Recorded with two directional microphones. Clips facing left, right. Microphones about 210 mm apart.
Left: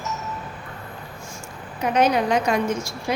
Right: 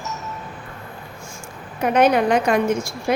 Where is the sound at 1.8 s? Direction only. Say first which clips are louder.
Right 3 dB; 55° right (ahead or behind).